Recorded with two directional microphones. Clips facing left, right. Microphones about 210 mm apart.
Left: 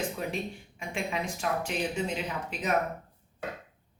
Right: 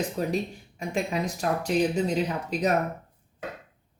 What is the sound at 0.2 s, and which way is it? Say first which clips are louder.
Speech: right 6 dB; 40° right (ahead or behind).